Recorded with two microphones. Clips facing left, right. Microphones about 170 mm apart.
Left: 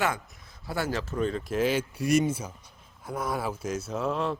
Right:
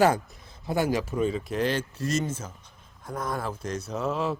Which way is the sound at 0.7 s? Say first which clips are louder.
Right 5 dB; 15° right (ahead or behind).